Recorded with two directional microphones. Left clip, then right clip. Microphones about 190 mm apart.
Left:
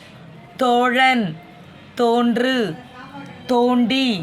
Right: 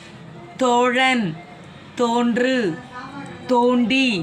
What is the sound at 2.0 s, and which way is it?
Speech, 65° left (ahead or behind).